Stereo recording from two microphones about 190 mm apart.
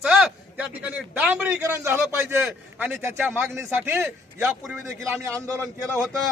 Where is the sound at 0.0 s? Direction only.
5° right (ahead or behind).